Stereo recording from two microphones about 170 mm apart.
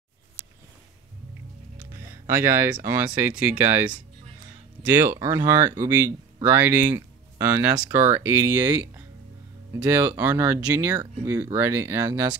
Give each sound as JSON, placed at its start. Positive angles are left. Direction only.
{"t": 1.9, "sound": "speech", "side_deg": -15}